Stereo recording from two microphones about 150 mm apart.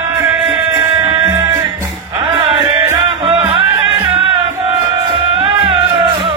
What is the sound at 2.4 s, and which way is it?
Music, 35° right (ahead or behind).